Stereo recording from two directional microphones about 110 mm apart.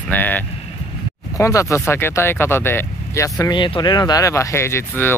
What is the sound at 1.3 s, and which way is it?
Speech, 25° left (ahead or behind).